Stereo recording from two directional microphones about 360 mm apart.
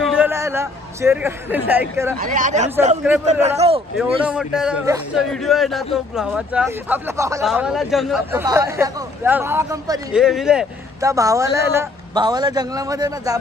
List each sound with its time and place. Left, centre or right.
0.0 s a man's voice: centre
2.1 s speech: right
3.0 s a man's voice: centre
3.4 s speech: centre
4.0 s a man's voice: centre